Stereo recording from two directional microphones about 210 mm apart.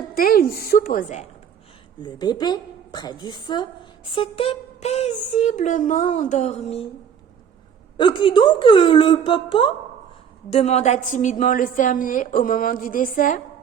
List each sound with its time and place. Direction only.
0.1 s speech: 45° left (ahead or behind)
2.0 s a woman's voice: 20° left (ahead or behind)
7.9 s a woman's voice: 20° left (ahead or behind); by 13.4 s 40° left (ahead or behind)